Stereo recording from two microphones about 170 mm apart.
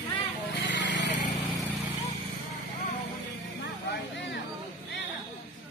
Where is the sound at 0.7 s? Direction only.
90° left.